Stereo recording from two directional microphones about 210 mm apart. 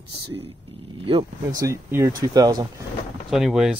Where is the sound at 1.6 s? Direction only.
15° right (ahead or behind).